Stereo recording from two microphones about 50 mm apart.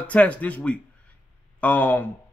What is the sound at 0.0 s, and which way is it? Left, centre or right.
A man's voice, left.